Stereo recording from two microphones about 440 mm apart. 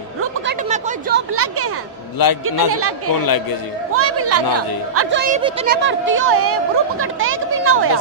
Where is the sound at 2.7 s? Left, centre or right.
Right.